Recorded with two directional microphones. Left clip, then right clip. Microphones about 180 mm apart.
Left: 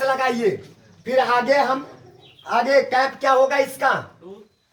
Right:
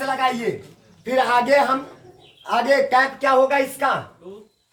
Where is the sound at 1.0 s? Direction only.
40° right (ahead or behind).